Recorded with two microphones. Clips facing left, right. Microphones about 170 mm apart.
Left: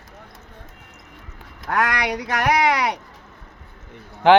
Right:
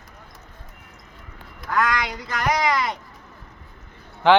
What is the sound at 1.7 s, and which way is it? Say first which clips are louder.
Speech: left 1 dB; 65° left (ahead or behind).